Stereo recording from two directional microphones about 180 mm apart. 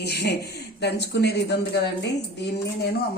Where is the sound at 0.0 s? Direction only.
65° left (ahead or behind).